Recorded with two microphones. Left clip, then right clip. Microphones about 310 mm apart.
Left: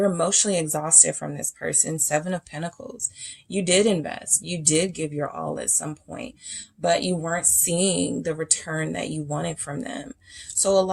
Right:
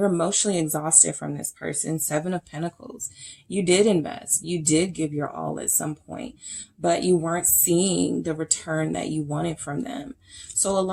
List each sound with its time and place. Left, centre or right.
0.0 s a woman's voice: left